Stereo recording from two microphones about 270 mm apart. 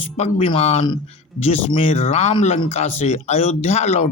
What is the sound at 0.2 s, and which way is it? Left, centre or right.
Speech, left.